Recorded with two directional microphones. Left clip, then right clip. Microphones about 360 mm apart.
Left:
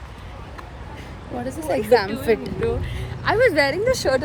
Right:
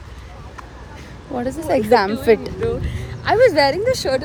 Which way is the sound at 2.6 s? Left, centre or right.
Centre.